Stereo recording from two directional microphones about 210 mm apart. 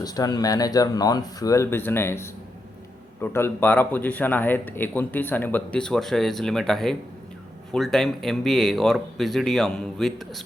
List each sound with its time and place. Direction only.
0.0 s a man's voice: 20° left (ahead or behind); by 10.4 s centre (ahead or behind)